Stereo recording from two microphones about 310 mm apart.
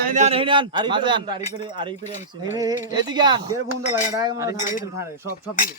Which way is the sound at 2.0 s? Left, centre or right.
Left.